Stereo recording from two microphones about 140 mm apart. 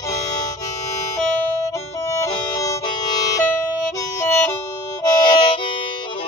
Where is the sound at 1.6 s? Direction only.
20° left (ahead or behind).